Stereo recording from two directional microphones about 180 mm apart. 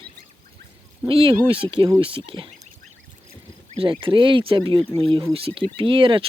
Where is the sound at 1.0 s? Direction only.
30° right (ahead or behind).